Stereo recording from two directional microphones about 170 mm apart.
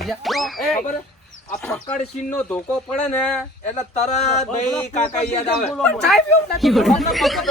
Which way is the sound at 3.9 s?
40° left (ahead or behind).